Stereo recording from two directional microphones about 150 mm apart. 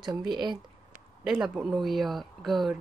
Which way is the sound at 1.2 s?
5° right (ahead or behind).